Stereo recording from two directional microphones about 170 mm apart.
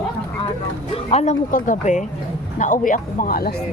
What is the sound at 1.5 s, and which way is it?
Speech, 50° left (ahead or behind).